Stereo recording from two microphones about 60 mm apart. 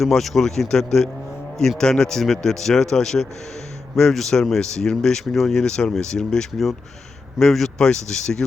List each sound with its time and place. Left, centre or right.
0.0 s speech: centre